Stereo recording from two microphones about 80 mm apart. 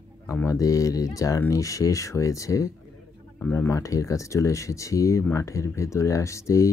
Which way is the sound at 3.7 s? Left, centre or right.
Left.